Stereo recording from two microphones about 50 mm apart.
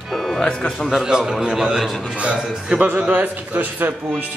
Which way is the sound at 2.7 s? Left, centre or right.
Right.